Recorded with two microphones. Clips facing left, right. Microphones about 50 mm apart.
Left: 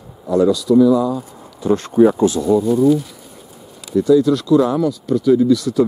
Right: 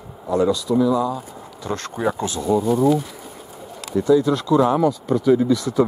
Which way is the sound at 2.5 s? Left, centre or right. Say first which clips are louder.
Left 1 dB; centre.